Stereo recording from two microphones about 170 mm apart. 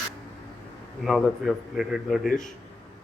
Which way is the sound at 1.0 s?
Centre (ahead or behind).